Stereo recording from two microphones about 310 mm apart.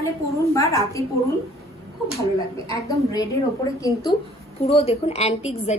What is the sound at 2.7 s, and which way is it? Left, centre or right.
A woman's voice, centre.